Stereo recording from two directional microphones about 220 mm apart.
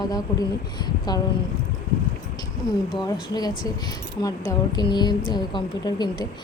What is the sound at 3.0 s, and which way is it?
A woman's voice, 20° left (ahead or behind).